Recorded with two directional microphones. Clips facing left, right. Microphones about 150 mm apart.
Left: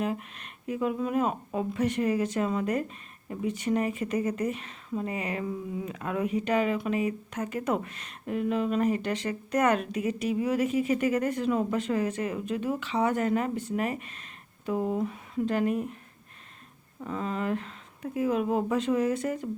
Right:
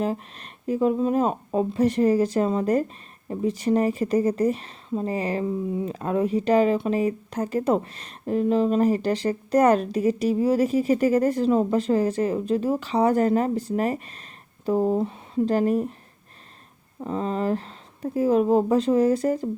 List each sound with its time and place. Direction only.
0.0 s speech: 35° right (ahead or behind)
17.0 s speech: 35° right (ahead or behind)